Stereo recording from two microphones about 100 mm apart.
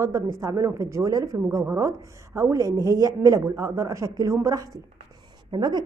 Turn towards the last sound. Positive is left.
turn(degrees=-45)  # may be behind; listen again after turning